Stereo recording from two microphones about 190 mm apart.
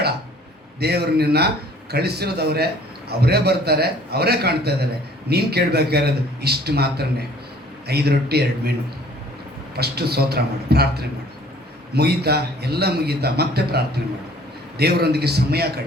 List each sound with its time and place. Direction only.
0.8 s a man's voice: 55° right (ahead or behind)
9.7 s a man's voice: 55° right (ahead or behind)